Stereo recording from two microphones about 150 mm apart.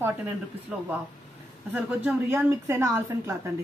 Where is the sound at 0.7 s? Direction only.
5° right (ahead or behind).